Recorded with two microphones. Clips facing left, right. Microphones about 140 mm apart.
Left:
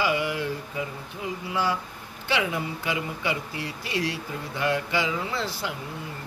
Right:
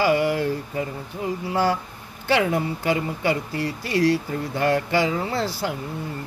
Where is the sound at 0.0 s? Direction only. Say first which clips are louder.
Right 6 dB; 40° right (ahead or behind).